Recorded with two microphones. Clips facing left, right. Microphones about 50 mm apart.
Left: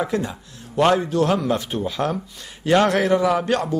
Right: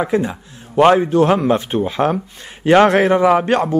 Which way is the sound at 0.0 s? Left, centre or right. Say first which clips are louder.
Right 6 dB; right.